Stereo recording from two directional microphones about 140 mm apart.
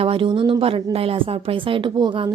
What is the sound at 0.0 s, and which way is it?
A woman's voice, 40° right (ahead or behind).